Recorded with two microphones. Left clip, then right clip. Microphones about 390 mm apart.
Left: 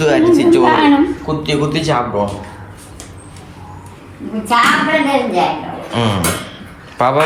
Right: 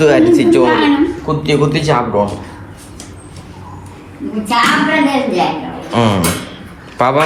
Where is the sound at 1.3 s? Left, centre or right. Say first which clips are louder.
Right 3 dB; centre.